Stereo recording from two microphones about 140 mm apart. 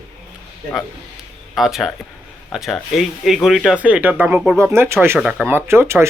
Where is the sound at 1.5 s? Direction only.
Centre (ahead or behind).